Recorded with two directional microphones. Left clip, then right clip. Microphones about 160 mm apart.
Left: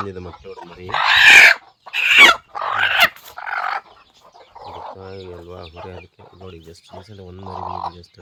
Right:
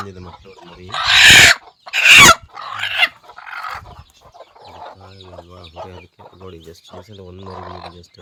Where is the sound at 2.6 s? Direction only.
25° left (ahead or behind).